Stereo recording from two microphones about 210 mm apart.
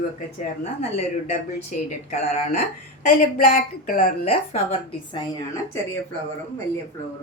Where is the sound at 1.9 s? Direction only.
35° left (ahead or behind).